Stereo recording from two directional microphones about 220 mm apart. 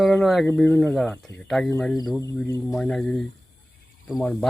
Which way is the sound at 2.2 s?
15° left (ahead or behind).